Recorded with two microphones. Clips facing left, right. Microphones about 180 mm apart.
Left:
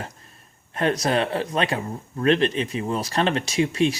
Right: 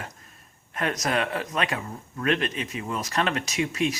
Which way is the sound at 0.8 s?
30° left (ahead or behind).